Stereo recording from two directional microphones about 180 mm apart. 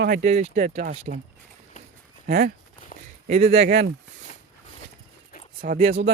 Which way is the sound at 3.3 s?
35° right (ahead or behind).